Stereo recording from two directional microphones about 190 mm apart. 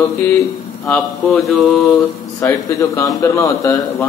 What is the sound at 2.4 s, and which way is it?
A man's voice, 15° left (ahead or behind).